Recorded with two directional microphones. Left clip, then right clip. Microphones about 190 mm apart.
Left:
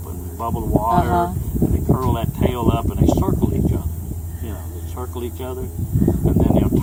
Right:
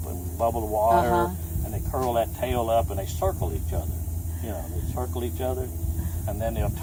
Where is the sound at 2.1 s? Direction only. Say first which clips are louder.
Left 2 dB; centre (ahead or behind).